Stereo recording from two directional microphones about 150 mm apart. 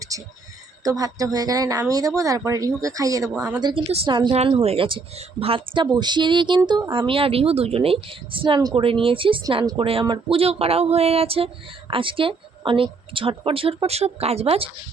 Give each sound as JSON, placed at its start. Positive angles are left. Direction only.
{"t": 0.1, "sound": "a woman's voice", "side_deg": -20}